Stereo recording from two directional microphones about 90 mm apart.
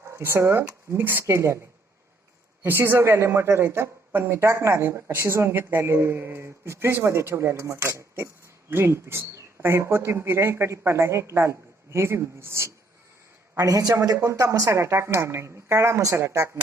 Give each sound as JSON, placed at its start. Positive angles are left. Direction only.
{"t": 0.1, "sound": "a woman's voice", "side_deg": -30}
{"t": 2.6, "sound": "a woman's voice", "side_deg": -25}
{"t": 13.6, "sound": "a woman's voice", "side_deg": -40}